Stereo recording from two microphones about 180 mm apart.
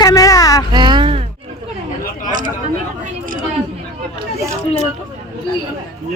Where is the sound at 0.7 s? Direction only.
25° right (ahead or behind).